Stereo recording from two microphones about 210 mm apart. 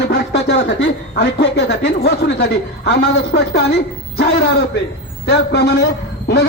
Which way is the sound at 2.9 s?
50° left (ahead or behind).